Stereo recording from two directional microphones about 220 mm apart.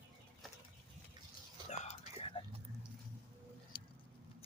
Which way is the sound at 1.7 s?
30° left (ahead or behind).